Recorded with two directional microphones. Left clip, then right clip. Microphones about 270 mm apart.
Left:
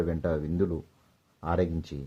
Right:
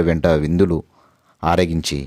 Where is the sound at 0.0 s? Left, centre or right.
Right.